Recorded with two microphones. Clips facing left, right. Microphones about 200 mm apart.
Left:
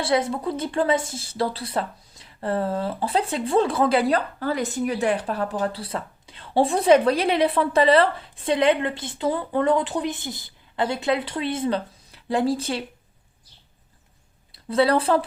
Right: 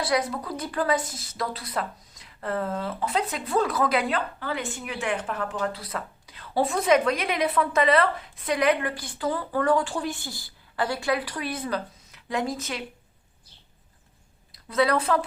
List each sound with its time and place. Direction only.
0.0 s speech: 25° left (ahead or behind)
14.5 s a woman's voice: 30° left (ahead or behind)